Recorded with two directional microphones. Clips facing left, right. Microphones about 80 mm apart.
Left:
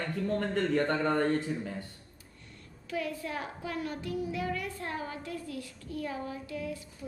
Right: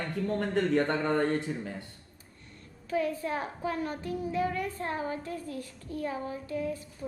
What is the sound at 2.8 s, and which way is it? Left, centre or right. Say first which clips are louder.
A woman's voice: right 5 dB; right.